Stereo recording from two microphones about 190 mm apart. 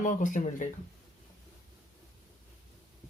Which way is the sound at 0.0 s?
45° left (ahead or behind).